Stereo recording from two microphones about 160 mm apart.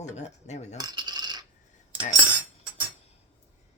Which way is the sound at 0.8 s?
25° right (ahead or behind).